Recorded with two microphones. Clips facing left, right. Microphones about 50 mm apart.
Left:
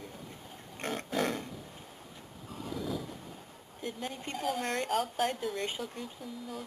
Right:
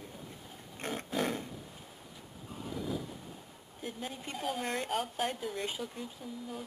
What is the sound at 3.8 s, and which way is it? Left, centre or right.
A woman's voice, centre.